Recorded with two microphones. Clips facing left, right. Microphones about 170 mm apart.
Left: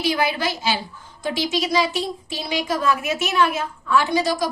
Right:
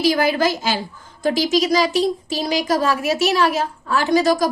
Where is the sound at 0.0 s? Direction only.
40° right (ahead or behind).